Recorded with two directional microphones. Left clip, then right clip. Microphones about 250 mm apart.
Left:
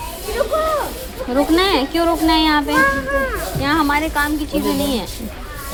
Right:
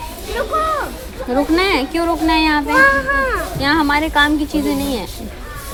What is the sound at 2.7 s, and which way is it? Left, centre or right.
Speech, right.